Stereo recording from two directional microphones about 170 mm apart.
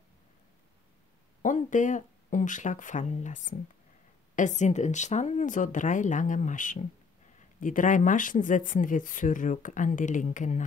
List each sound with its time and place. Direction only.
1.4 s speech: 50° left (ahead or behind)